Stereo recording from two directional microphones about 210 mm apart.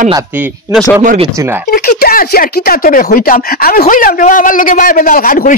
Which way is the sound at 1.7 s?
45° left (ahead or behind).